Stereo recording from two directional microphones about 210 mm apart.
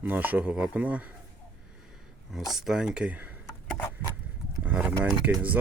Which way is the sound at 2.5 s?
Centre (ahead or behind).